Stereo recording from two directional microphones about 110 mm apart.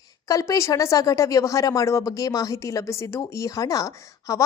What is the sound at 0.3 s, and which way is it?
Speech, 30° left (ahead or behind).